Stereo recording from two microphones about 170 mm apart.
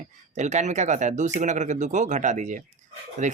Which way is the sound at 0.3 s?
45° right (ahead or behind).